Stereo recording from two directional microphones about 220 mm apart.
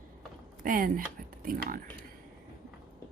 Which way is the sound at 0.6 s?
40° right (ahead or behind).